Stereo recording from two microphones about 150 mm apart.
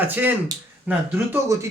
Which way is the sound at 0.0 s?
10° right (ahead or behind).